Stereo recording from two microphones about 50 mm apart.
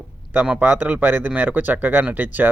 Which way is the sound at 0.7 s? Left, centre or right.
Right.